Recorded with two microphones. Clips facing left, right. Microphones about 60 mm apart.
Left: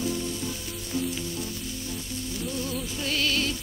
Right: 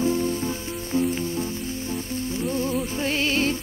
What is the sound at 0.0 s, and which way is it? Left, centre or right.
Music, right.